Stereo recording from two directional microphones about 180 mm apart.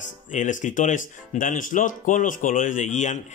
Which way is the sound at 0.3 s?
45° left (ahead or behind).